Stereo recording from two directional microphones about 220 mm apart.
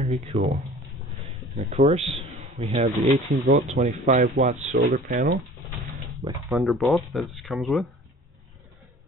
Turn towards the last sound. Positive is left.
turn(degrees=0)  # may be behind; listen again after turning